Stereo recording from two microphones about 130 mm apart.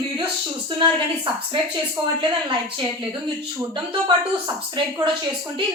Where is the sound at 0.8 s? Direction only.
40° right (ahead or behind).